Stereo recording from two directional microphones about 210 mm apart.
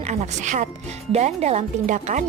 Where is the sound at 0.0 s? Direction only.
35° right (ahead or behind).